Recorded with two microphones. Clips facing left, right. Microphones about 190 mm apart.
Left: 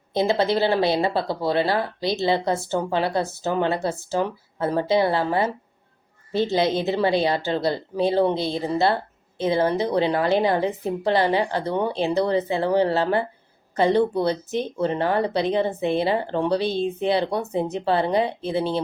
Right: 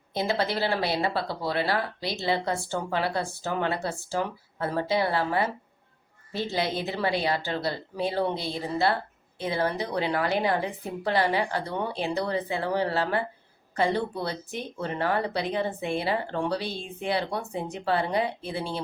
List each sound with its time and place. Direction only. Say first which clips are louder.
0.1 s speech: left 7 dB; 25° left (ahead or behind)